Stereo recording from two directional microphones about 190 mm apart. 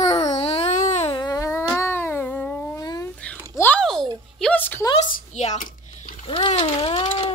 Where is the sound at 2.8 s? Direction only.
20° left (ahead or behind).